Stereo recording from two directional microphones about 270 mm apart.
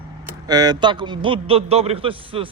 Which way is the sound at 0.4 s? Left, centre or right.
Centre.